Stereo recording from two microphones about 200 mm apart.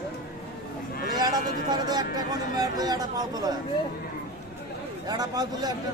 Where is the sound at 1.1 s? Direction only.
20° right (ahead or behind).